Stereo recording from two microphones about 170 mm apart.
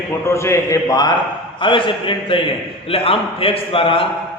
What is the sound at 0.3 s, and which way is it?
A man's voice, 15° left (ahead or behind).